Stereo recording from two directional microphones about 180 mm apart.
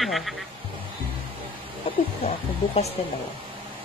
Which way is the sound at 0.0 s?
Centre (ahead or behind).